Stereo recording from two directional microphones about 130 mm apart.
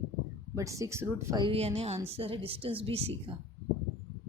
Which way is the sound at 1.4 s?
45° right (ahead or behind).